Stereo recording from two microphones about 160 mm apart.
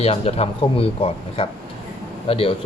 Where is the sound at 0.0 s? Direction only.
40° left (ahead or behind).